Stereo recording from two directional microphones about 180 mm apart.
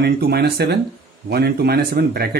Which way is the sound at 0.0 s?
60° right (ahead or behind).